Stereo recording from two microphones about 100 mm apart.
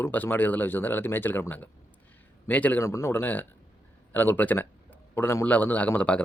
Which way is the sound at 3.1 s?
20° left (ahead or behind).